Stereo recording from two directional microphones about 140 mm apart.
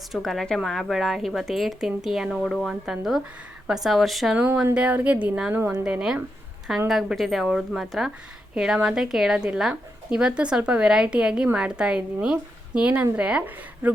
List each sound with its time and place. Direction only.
0.1 s speech: centre (ahead or behind)